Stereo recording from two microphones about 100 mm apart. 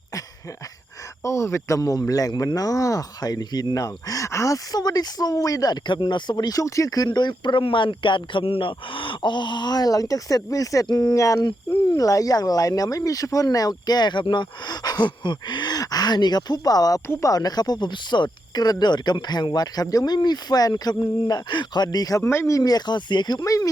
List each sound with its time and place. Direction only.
1.2 s speech: 30° left (ahead or behind)
22.2 s speech: 25° left (ahead or behind)